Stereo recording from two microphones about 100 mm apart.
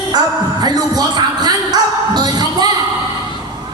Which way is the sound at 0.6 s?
45° right (ahead or behind).